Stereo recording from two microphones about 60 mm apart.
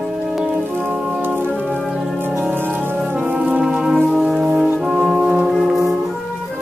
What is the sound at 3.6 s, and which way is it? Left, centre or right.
Music, centre.